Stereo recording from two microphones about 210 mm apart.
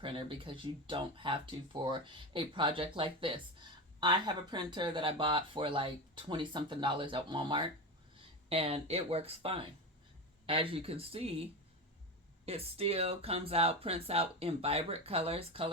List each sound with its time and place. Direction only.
0.0 s speech: 25° right (ahead or behind)
12.5 s speech: 30° right (ahead or behind)